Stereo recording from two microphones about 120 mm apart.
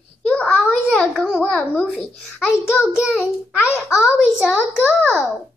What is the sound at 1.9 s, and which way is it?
A child's voice, centre (ahead or behind).